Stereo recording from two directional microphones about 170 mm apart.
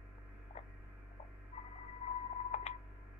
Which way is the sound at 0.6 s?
35° left (ahead or behind).